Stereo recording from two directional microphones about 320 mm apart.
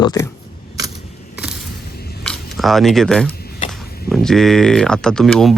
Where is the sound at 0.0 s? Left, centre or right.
Centre.